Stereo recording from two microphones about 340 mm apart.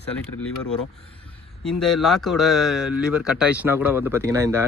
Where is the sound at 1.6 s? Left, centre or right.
Centre.